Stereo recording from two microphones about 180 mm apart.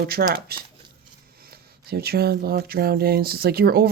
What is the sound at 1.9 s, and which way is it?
Speech, 60° right (ahead or behind).